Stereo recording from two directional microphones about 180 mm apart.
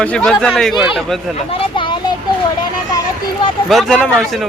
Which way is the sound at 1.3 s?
30° left (ahead or behind).